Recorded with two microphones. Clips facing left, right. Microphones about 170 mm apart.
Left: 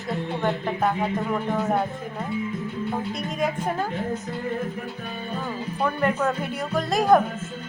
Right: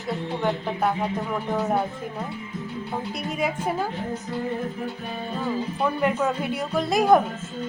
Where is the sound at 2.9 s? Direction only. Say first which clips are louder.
Left 1 dB; centre (ahead or behind).